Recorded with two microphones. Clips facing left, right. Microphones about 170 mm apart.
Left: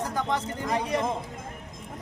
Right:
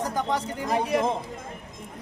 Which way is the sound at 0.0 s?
15° right (ahead or behind).